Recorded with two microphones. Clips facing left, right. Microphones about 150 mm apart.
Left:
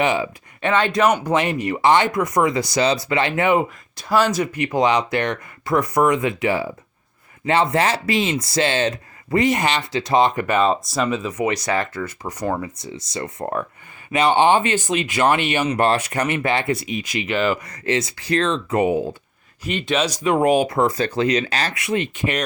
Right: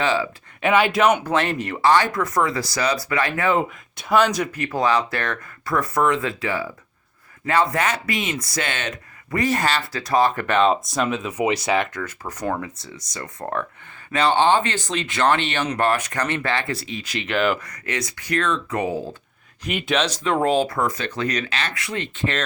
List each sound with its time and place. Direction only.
0.0 s speech: 20° left (ahead or behind)
0.6 s speech: 5° right (ahead or behind)
1.2 s speech: 15° left (ahead or behind)
4.1 s speech: 5° left (ahead or behind)
4.5 s speech: 15° left (ahead or behind)
10.4 s speech: 5° left (ahead or behind)
11.9 s speech: 10° left (ahead or behind)
17.6 s speech: 25° left (ahead or behind)
19.6 s speech: centre (ahead or behind)
20.0 s speech: 10° left (ahead or behind)